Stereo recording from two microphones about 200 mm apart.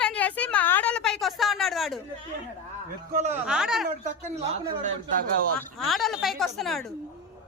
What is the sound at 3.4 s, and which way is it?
Speech, 5° right (ahead or behind).